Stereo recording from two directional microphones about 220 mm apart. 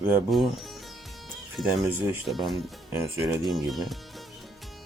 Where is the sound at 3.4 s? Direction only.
Centre (ahead or behind).